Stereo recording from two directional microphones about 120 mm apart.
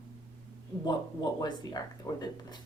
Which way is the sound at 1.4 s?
35° left (ahead or behind).